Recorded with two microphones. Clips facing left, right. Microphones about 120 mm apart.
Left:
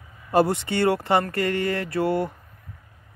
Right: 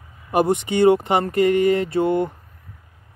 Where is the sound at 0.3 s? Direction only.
20° right (ahead or behind).